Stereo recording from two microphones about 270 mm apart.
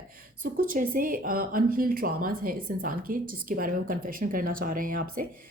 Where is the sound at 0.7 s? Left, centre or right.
Right.